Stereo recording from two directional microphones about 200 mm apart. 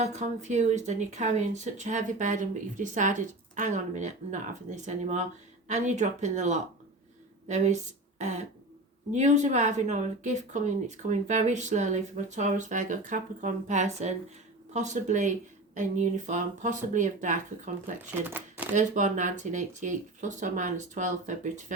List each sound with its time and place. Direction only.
0.0 s speech: 35° right (ahead or behind)
9.1 s speech: 35° right (ahead or behind)
18.3 s a sound: 10° right (ahead or behind)
18.7 s speech: 40° right (ahead or behind)